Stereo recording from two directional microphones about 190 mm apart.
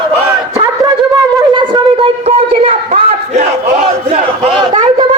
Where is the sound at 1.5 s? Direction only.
25° right (ahead or behind).